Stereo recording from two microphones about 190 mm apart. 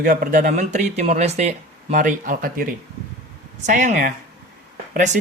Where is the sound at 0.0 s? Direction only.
50° right (ahead or behind).